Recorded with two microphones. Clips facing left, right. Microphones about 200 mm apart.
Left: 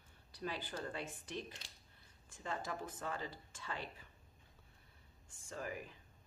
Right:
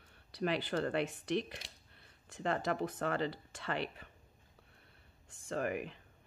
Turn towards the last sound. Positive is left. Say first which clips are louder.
# right 9 dB
turn(degrees=-70)  # may be behind; listen again after turning